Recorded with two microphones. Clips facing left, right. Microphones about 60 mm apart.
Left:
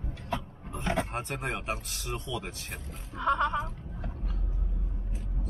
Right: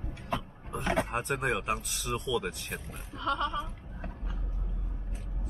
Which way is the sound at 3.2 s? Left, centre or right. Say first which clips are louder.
Left 4 dB; left.